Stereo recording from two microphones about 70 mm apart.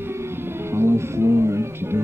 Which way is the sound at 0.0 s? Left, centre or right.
Right.